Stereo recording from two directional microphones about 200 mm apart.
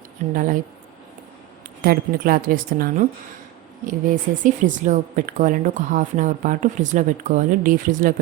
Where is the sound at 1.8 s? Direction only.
45° right (ahead or behind).